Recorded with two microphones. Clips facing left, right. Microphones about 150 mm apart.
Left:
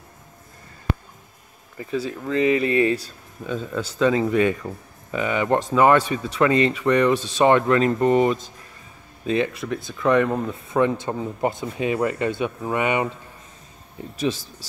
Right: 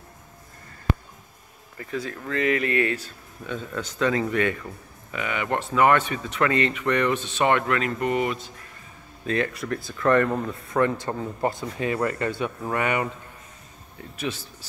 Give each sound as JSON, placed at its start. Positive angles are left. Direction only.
{"t": 2.0, "sound": "speech", "side_deg": 15}
{"t": 3.4, "sound": "speech", "side_deg": 10}
{"t": 7.2, "sound": "speech", "side_deg": 35}
{"t": 9.2, "sound": "speech", "side_deg": 20}
{"t": 9.8, "sound": "speech", "side_deg": 5}